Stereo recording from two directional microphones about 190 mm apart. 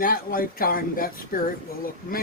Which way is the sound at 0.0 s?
50° left (ahead or behind).